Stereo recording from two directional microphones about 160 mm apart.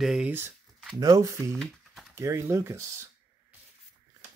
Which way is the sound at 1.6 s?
Centre (ahead or behind).